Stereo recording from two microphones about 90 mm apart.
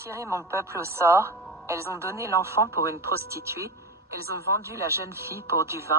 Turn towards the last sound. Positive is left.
turn(degrees=-30)  # may be behind; listen again after turning